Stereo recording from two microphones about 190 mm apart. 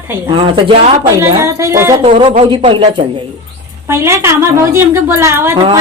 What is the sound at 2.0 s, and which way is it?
Speech, 30° right (ahead or behind).